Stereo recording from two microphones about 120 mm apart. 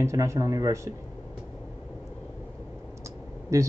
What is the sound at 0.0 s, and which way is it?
Speech, 25° right (ahead or behind).